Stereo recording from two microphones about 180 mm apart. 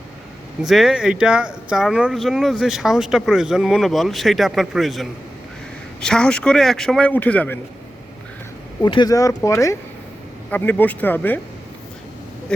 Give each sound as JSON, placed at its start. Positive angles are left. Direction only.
{"t": 0.6, "sound": "speech", "side_deg": 0}
{"t": 8.8, "sound": "speech", "side_deg": 25}
{"t": 12.5, "sound": "speech", "side_deg": 5}